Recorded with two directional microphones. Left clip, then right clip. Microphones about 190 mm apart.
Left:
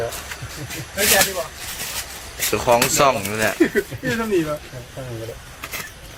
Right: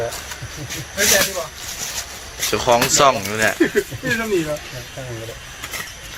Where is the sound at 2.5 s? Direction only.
10° left (ahead or behind).